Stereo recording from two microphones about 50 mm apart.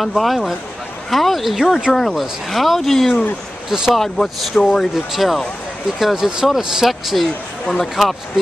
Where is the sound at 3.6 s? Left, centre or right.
Centre.